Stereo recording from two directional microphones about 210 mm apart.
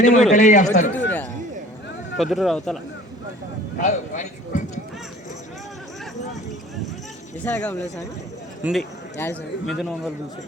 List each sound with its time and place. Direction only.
0.0 s a man's voice: 35° left (ahead or behind)
2.1 s speech: centre (ahead or behind)
3.8 s speech: 35° left (ahead or behind)
7.4 s a man's voice: 10° left (ahead or behind)
8.6 s a man's voice: centre (ahead or behind)